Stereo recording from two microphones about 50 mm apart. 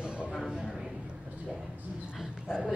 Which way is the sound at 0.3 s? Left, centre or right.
Centre.